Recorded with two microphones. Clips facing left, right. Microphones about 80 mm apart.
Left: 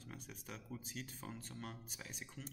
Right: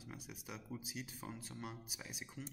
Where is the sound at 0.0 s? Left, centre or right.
Centre.